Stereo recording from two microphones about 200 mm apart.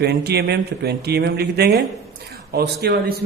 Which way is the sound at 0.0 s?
55° right (ahead or behind).